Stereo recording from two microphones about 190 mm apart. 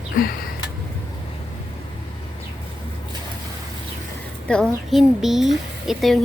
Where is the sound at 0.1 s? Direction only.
50° left (ahead or behind).